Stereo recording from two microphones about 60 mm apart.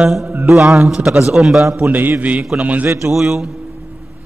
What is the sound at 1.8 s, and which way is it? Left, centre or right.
A man's voice, right.